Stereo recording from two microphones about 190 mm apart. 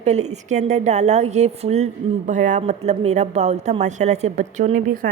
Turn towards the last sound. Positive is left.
turn(degrees=-45)  # may be behind; listen again after turning